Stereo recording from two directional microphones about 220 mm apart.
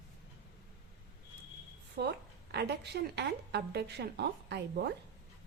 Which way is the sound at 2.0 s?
50° right (ahead or behind).